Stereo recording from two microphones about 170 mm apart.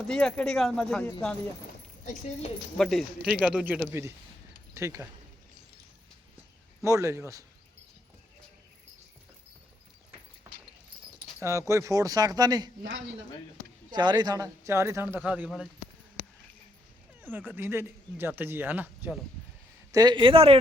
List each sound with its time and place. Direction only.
0.1 s speech: 5° left (ahead or behind)
2.7 s speech: centre (ahead or behind); by 5.0 s 15° right (ahead or behind)
6.8 s speech: 15° right (ahead or behind)
10.5 s a sound: 15° right (ahead or behind)
11.3 s speech: 15° right (ahead or behind)
13.9 s speech: 25° right (ahead or behind); by 15.7 s 5° right (ahead or behind)
17.2 s speech: 10° right (ahead or behind)
19.9 s speech: 25° right (ahead or behind)